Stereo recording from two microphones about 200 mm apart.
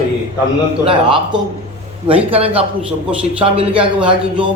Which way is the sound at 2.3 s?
30° right (ahead or behind).